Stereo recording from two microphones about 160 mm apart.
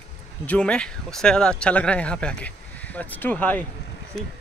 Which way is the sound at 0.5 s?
5° left (ahead or behind).